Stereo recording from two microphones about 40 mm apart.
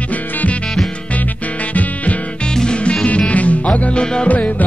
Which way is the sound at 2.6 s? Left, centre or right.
Left.